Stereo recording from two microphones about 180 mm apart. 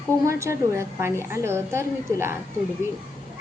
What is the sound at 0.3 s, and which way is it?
A woman's voice, 15° right (ahead or behind).